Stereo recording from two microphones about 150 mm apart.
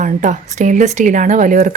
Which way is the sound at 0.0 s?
60° right (ahead or behind).